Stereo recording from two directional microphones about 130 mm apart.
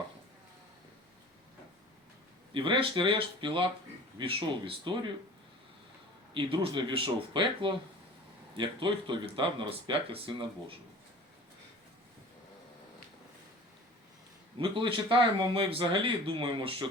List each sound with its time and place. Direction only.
2.5 s speech: 40° right (ahead or behind)
6.3 s speech: 40° right (ahead or behind)
14.6 s speech: 40° right (ahead or behind)